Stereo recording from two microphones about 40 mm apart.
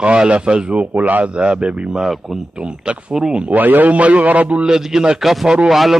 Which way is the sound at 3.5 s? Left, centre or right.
Right.